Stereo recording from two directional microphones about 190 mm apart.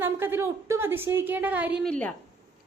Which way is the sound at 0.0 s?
10° right (ahead or behind).